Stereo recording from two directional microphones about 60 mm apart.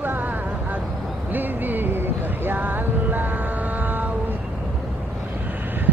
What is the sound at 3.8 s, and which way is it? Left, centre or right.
Vehicle, right.